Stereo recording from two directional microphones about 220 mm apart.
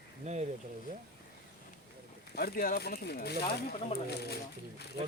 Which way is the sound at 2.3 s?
45° left (ahead or behind).